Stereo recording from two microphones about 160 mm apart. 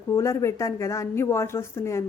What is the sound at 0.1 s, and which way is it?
A woman's voice, 15° left (ahead or behind).